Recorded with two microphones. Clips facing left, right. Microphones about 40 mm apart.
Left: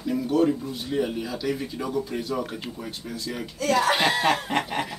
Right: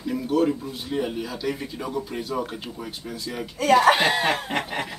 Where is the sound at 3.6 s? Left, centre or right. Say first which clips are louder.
Right 5 dB; right.